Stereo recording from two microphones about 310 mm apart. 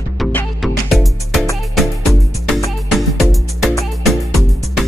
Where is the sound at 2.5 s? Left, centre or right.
Centre.